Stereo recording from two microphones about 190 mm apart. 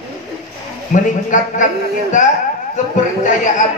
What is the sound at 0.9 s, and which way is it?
Speech, 45° left (ahead or behind).